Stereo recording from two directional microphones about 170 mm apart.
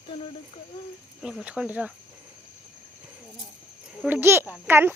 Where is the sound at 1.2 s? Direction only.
5° right (ahead or behind).